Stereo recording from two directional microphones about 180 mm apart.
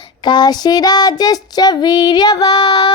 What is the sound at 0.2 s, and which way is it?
Child singing, 25° left (ahead or behind).